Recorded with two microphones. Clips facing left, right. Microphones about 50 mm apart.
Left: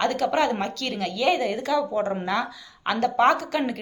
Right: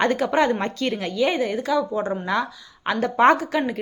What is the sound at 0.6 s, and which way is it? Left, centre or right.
Speech, right.